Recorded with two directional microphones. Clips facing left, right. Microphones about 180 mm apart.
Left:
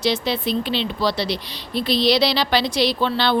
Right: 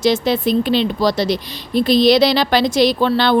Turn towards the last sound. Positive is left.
turn(degrees=-50)  # may be behind; listen again after turning